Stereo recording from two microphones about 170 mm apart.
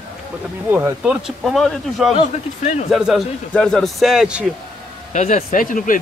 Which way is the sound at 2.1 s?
40° left (ahead or behind).